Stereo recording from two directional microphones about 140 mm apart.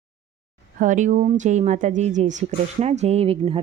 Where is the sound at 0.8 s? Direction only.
65° right (ahead or behind).